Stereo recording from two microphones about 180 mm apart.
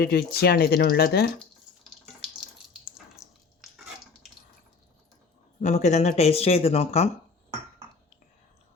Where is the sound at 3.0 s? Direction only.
Centre (ahead or behind).